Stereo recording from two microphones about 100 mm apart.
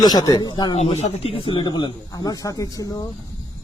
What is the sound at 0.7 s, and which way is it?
Speech, 85° left.